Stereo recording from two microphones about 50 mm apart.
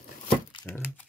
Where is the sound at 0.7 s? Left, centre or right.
Left.